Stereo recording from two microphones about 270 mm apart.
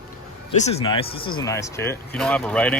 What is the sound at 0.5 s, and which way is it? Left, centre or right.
Speech, left.